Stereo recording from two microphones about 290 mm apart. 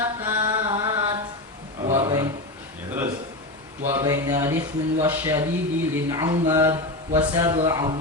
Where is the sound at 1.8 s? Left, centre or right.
Centre.